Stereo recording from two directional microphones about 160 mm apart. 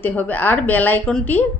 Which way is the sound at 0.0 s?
10° left (ahead or behind).